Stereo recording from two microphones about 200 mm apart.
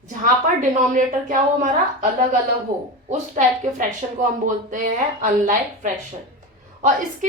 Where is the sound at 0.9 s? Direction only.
40° right (ahead or behind).